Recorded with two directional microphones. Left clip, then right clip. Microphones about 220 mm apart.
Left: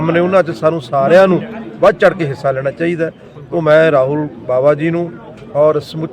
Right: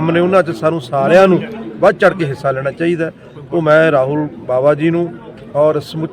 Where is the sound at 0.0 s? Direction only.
Centre (ahead or behind).